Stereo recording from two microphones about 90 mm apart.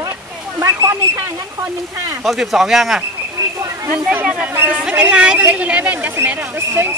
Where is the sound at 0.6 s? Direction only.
35° right (ahead or behind).